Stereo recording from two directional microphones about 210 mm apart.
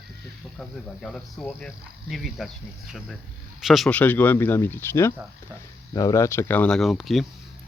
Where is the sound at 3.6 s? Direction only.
Centre (ahead or behind).